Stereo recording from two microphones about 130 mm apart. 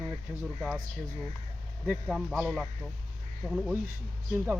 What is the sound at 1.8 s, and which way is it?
Speech, 5° right (ahead or behind).